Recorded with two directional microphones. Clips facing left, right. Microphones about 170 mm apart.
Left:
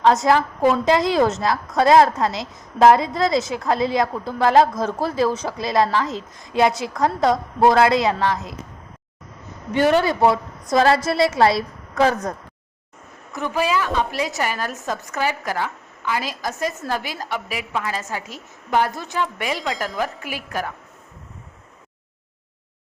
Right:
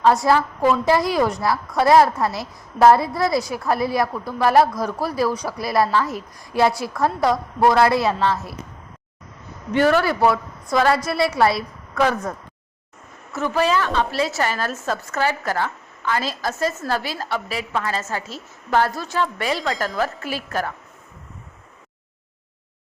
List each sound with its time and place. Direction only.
0.0 s a woman's voice: 20° left (ahead or behind)
9.7 s a woman's voice: 20° left (ahead or behind)
13.3 s a woman's voice: 15° left (ahead or behind)